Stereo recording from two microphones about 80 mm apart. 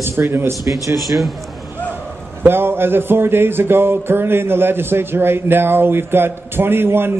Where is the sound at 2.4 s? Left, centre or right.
Right.